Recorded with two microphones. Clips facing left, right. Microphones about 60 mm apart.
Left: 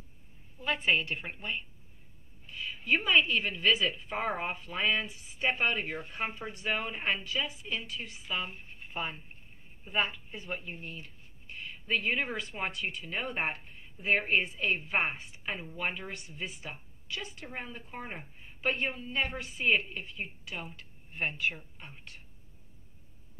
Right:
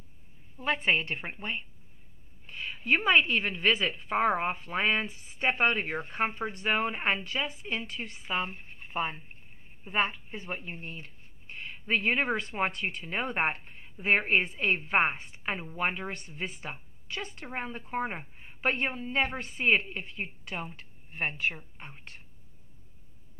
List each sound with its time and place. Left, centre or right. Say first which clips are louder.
0.6 s speech: right 2 dB; right
2.5 s speech: right 2 dB; right
10.1 s speech: right 1 dB; right